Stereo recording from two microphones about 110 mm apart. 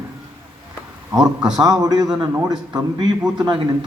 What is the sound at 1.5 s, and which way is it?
Speech, 40° right (ahead or behind).